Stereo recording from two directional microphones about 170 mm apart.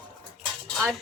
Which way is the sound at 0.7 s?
Centre (ahead or behind).